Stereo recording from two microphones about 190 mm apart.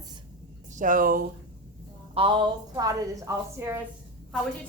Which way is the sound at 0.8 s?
45° right (ahead or behind).